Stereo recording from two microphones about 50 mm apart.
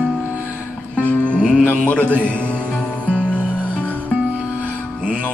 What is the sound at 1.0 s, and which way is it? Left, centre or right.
Music, left.